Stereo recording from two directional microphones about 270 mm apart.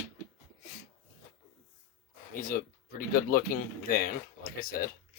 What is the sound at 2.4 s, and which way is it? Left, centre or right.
Speech, left.